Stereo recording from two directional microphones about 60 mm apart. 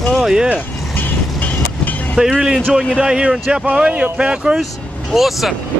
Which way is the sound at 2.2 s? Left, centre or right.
Centre.